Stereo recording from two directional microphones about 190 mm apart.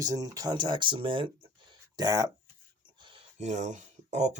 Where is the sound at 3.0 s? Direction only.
30° right (ahead or behind).